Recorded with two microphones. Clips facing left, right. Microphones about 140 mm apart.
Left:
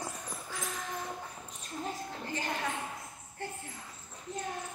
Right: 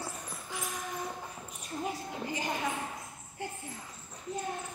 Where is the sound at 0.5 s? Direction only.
10° right (ahead or behind).